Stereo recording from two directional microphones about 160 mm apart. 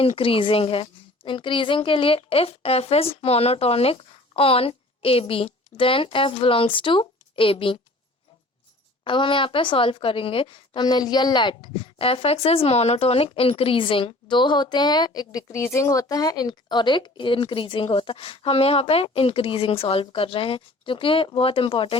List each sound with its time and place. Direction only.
0.0 s a woman's voice: 35° left (ahead or behind)
9.0 s a woman's voice: 30° left (ahead or behind)